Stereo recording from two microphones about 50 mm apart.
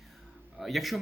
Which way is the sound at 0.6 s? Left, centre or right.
Centre.